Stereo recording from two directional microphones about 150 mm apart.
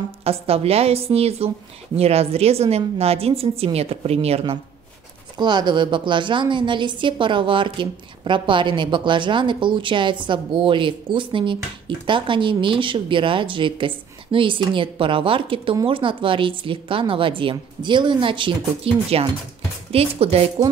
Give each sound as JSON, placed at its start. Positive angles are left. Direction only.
{"t": 0.2, "sound": "a woman's voice", "side_deg": -40}
{"t": 5.4, "sound": "a woman's voice", "side_deg": -30}